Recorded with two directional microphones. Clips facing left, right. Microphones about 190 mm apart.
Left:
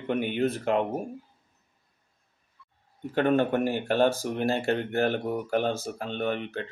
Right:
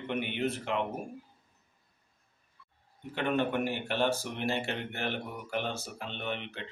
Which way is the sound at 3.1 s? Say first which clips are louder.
Left 7 dB; 45° left (ahead or behind).